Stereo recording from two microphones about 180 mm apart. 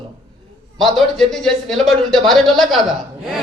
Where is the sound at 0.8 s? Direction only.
Centre (ahead or behind).